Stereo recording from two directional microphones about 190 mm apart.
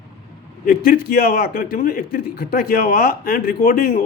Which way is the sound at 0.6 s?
50° left (ahead or behind).